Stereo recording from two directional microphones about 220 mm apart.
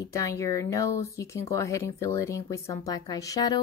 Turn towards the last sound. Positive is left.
turn(degrees=15)  # may be behind; listen again after turning